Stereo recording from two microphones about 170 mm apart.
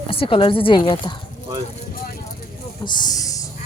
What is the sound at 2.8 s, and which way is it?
Speech, 25° left (ahead or behind).